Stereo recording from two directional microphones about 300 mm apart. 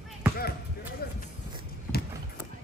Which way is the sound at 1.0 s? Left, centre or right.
Left.